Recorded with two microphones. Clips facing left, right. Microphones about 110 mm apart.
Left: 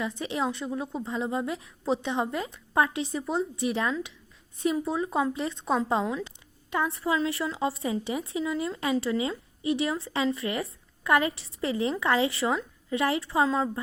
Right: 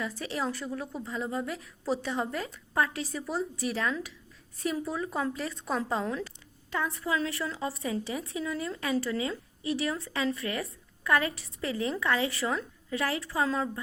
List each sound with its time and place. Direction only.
0.2 s speech: 20° left (ahead or behind)
6.9 s speech: 30° left (ahead or behind)